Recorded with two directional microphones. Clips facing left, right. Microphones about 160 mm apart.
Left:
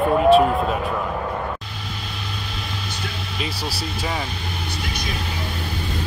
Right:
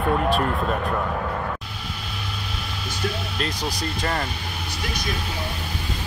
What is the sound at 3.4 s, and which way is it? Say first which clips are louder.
Vehicle: even; 5° left (ahead or behind).